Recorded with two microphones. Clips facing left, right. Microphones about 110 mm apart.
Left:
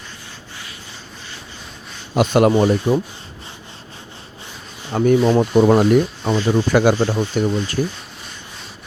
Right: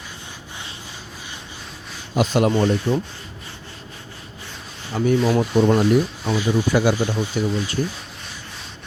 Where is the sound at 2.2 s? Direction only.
65° left (ahead or behind).